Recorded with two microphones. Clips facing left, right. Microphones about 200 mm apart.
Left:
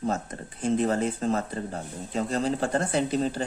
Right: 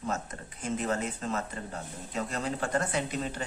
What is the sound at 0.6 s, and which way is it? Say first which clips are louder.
Speech: left 7 dB; 35° left (ahead or behind).